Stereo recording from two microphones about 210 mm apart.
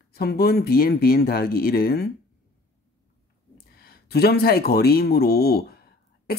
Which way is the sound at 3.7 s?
45° left (ahead or behind).